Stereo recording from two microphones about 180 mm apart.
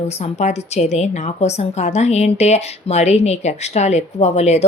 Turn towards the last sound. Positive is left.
turn(degrees=35)  # may be behind; listen again after turning